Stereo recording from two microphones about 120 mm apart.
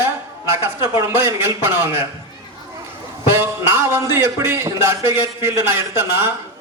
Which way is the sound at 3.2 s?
20° right (ahead or behind).